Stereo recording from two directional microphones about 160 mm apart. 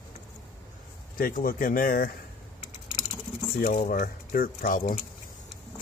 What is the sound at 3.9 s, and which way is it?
Speech, 65° left (ahead or behind).